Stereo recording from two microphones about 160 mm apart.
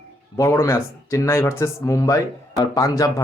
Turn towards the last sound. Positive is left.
turn(degrees=20)  # may be behind; listen again after turning